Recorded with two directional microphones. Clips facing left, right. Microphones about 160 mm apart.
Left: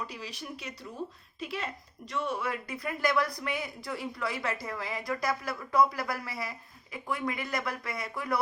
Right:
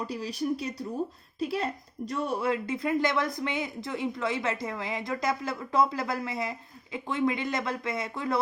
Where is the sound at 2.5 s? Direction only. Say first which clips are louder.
Right 7 dB; 25° right (ahead or behind).